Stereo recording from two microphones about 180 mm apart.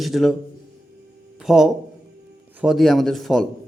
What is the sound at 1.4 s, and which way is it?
Speech, centre (ahead or behind).